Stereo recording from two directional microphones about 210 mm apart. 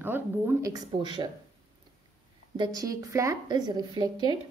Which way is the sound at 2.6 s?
15° right (ahead or behind).